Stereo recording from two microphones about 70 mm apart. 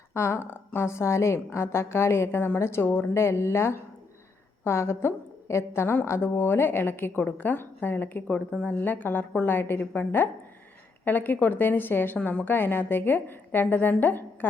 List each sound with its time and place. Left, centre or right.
0.1 s a woman's voice: left
3.2 s a woman's voice: left